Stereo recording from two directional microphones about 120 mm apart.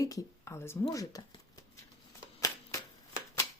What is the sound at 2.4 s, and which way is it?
Shuffling cards, 25° left (ahead or behind).